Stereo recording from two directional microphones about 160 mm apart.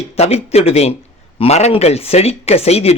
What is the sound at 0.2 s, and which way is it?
A man's voice, 40° left (ahead or behind).